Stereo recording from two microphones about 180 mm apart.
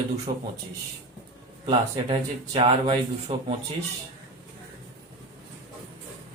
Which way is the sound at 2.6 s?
30° right (ahead or behind).